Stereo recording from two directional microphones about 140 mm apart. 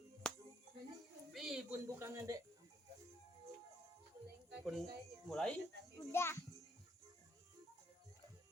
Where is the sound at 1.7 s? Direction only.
20° right (ahead or behind).